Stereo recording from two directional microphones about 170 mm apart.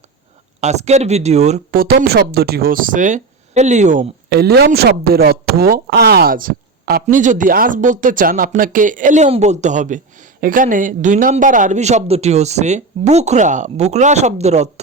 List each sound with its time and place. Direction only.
0.6 s speech: 40° right (ahead or behind)
1.7 s speech: 60° right (ahead or behind)
4.3 s speech: 70° right (ahead or behind); by 14.7 s 40° right (ahead or behind)